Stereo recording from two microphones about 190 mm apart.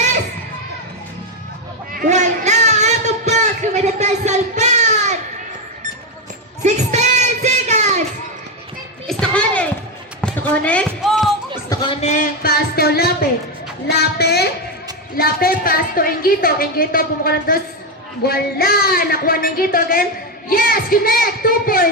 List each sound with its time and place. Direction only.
1.9 s a sound: 45° right (ahead or behind)
6.6 s child singing: 35° right (ahead or behind)
9.0 s children playing: 5° left (ahead or behind)
10.2 s basketball bounce: 5° left (ahead or behind)
11.7 s a sound: 25° left (ahead or behind); by 13.1 s 55° left (ahead or behind)
13.8 s music: 60° left (ahead or behind)
15.1 s a woman's voice: 50° left (ahead or behind)